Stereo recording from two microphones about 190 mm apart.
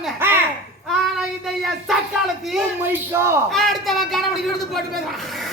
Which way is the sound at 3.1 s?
15° right (ahead or behind).